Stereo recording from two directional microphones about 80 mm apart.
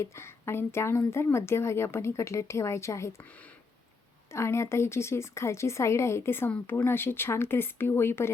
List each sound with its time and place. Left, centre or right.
0.0 s a woman's voice: left
4.3 s a woman's voice: left